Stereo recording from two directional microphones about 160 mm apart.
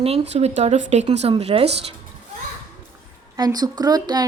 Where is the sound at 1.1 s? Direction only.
40° right (ahead or behind).